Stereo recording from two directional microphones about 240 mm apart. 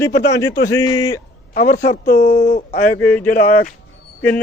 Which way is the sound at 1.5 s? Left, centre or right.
Left.